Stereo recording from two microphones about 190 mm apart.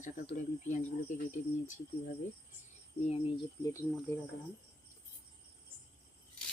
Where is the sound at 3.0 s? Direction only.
35° left (ahead or behind).